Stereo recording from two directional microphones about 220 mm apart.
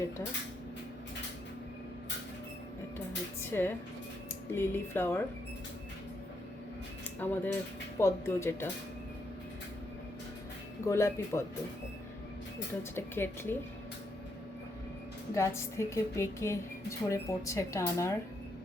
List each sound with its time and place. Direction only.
3.5 s a woman's voice: 10° left (ahead or behind)
7.2 s a woman's voice: 10° left (ahead or behind)
10.8 s a woman's voice: 15° left (ahead or behind)
13.0 s a woman's voice: 10° left (ahead or behind)
15.4 s a woman's voice: 10° left (ahead or behind)